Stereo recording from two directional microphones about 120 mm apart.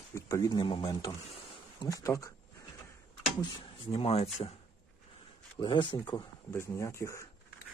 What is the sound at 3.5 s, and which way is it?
Cutlery, 50° left (ahead or behind).